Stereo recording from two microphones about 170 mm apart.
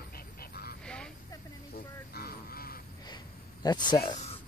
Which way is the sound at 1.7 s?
65° left (ahead or behind).